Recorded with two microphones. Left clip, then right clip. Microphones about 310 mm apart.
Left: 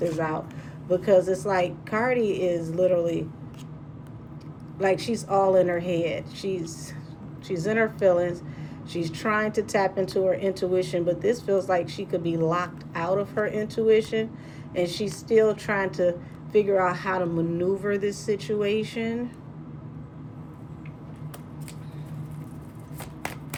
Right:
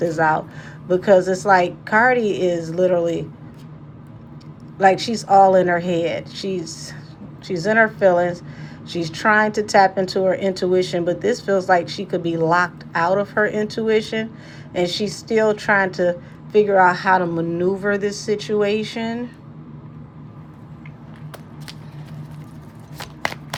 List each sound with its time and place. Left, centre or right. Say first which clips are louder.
0.9 s speech: right 5 dB; centre
4.8 s speech: right 9 dB; centre